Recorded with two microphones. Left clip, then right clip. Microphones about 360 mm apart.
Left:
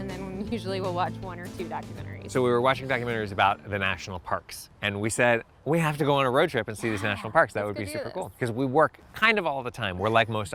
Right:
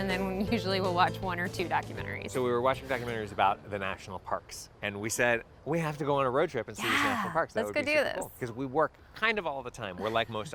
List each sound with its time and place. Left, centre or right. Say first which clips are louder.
0.0 s music: right 5 dB; centre
0.5 s speech: even; centre
1.3 s speech: right 5 dB; centre
2.3 s speech: left 6 dB; left
7.9 s speech: right 6 dB; right
8.4 s speech: left 8 dB; left